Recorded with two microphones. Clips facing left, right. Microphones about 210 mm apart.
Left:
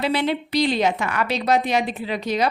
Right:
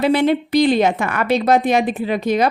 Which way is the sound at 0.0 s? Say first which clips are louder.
Right 7 dB; 50° right (ahead or behind).